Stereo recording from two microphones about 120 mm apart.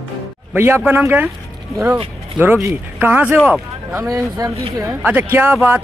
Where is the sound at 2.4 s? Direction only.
20° right (ahead or behind).